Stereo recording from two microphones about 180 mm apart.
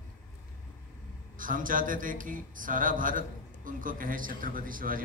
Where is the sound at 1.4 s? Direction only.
50° right (ahead or behind).